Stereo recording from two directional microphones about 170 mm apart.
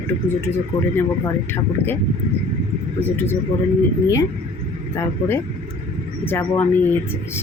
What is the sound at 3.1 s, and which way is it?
Speech, 10° left (ahead or behind).